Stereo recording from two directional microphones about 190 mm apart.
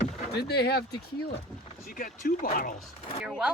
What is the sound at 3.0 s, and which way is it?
Speech, 30° left (ahead or behind).